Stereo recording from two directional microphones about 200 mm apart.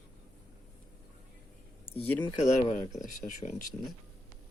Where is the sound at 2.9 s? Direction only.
40° left (ahead or behind).